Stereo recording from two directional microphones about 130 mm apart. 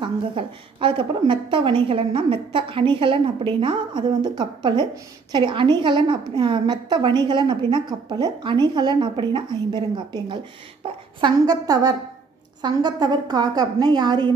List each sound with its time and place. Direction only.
0.0 s a woman's voice: 40° right (ahead or behind)